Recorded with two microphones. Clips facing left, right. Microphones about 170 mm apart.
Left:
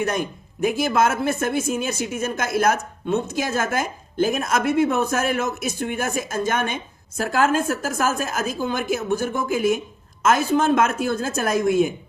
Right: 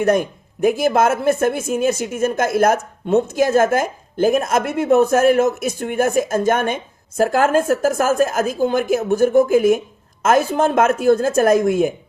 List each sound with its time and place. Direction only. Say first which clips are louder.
0.6 s a woman's voice: right 4 dB; 50° right (ahead or behind)